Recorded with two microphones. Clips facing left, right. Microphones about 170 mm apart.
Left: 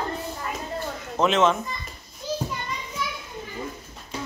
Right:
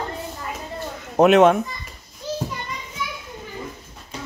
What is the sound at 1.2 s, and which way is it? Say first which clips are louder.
Speech: right 7 dB; 60° right (ahead or behind).